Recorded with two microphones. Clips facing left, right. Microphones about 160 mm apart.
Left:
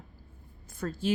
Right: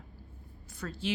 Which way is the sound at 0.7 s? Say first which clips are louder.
Left 5 dB; 50° left (ahead or behind).